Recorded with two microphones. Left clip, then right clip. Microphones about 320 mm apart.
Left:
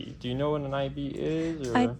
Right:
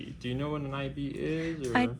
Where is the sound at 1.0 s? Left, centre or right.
Left.